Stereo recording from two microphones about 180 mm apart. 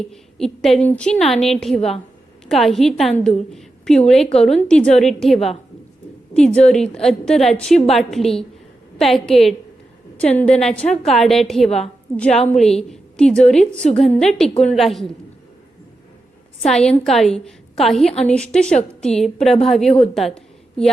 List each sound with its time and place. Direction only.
0.1 s a woman's voice: centre (ahead or behind)
16.6 s a woman's voice: 5° left (ahead or behind)
20.1 s a sound: 5° left (ahead or behind)